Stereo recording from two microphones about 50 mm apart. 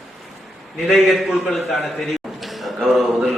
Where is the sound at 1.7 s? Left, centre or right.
Centre.